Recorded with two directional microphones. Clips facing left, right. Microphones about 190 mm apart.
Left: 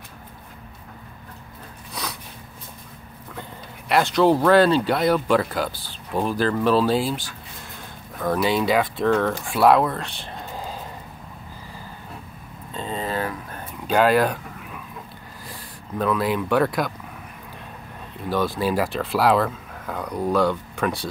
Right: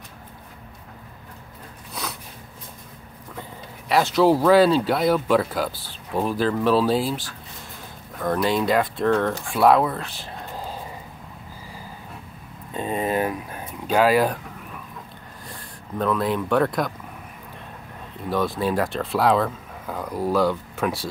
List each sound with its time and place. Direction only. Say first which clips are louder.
2.0 s sniff: even; centre (ahead or behind)
3.9 s speech: even; centre (ahead or behind)
9.5 s a sound: even; centre (ahead or behind)
12.7 s a sound: right 4 dB; 20° right (ahead or behind); by 14.4 s 5° right (ahead or behind)
16.0 s speech: even; 5° left (ahead or behind)
18.3 s speech: even; centre (ahead or behind)